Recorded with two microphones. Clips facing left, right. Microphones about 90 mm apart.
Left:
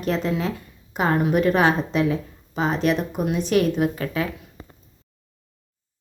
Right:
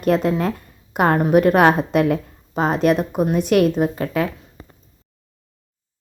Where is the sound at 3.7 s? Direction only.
40° right (ahead or behind).